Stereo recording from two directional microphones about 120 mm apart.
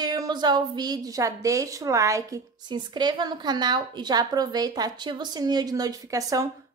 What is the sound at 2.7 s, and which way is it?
A woman's voice, 40° right (ahead or behind).